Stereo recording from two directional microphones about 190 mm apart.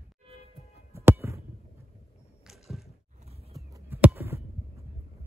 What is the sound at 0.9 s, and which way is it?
Music, 15° right (ahead or behind).